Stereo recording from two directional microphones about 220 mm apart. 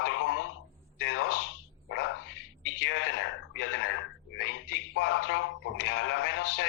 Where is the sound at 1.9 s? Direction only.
55° left (ahead or behind).